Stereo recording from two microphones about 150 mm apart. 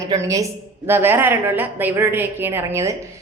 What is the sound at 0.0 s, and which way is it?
A woman's voice, 20° right (ahead or behind).